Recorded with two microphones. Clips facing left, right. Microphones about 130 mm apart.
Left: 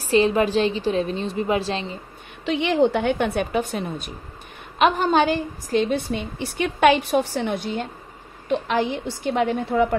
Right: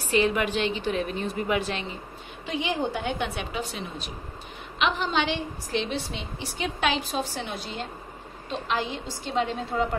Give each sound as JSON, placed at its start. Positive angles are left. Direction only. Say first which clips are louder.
{"t": 0.0, "sound": "a woman's voice", "louder": "left 5 dB", "side_deg": 30}
{"t": 2.4, "sound": "a woman's voice", "louder": "left 9 dB", "side_deg": 65}